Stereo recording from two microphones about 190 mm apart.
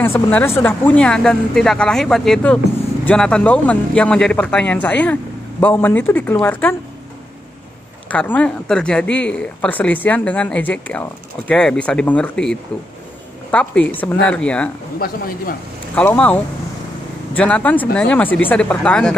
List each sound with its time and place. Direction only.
0.0 s speech: 10° left (ahead or behind)
8.1 s speech: 5° left (ahead or behind)
15.0 s speech: 50° left (ahead or behind)
15.9 s speech: 10° left (ahead or behind)
17.4 s speech: 5° left (ahead or behind)